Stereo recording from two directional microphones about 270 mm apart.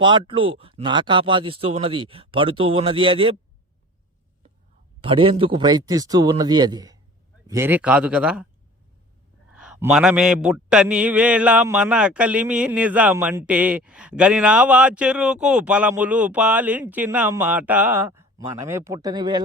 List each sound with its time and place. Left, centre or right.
0.0 s speech: centre
4.9 s speech: centre
7.4 s mantra: centre
9.5 s mantra: centre